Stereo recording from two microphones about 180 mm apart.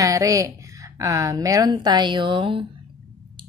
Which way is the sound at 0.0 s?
20° right (ahead or behind).